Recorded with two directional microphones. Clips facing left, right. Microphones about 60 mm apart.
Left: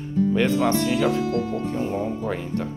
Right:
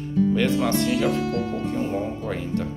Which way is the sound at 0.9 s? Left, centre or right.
Left.